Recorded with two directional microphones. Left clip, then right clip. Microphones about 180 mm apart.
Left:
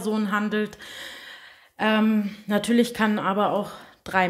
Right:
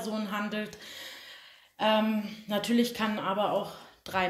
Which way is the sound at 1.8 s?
50° left (ahead or behind).